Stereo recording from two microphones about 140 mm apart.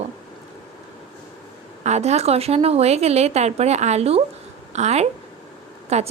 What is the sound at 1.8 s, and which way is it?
A woman's voice, 50° right (ahead or behind).